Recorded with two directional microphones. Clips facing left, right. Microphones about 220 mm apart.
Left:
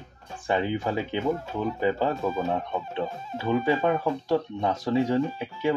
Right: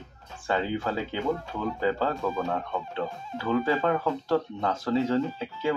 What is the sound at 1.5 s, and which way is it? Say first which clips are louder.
Speech: left 2 dB; 20° left (ahead or behind).